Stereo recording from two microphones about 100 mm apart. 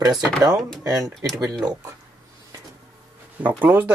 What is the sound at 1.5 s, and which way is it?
Speech, 10° right (ahead or behind).